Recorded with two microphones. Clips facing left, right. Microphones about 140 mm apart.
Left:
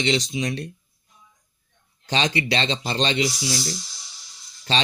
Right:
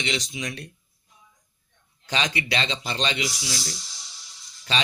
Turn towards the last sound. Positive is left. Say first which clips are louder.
# left 3 dB
turn(degrees=30)  # may be behind; listen again after turning